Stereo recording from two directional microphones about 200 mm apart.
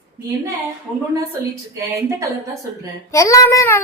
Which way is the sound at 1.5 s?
15° right (ahead or behind).